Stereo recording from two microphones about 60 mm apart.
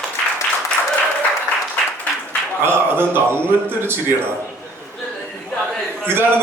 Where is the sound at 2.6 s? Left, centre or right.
Right.